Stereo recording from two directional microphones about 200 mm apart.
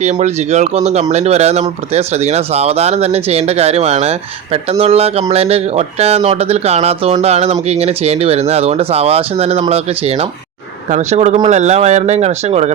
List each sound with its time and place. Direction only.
0.0 s speech: 35° right (ahead or behind)